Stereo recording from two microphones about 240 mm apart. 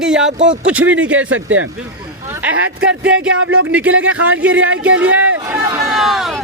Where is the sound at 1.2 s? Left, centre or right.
Right.